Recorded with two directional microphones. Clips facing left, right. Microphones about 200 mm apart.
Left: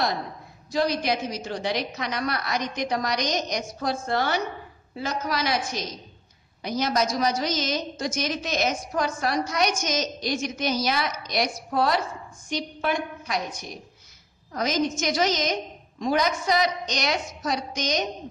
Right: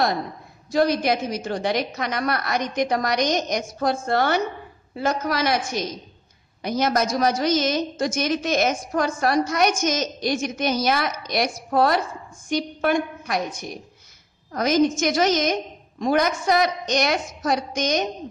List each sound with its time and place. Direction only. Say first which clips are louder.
0.7 s a woman's voice: right 4 dB; 50° right (ahead or behind)